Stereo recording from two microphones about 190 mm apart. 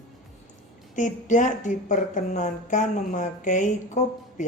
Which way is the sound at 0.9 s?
40° left (ahead or behind).